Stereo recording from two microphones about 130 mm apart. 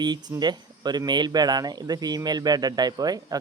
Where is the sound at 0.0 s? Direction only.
35° right (ahead or behind).